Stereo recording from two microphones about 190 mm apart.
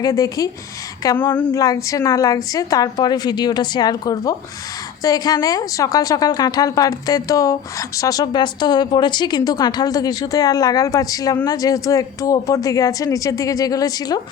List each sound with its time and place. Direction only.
0.0 s a woman's voice: 20° left (ahead or behind)